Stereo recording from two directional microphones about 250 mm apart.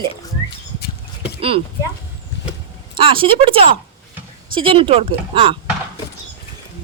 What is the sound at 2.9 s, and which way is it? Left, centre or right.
Speech, right.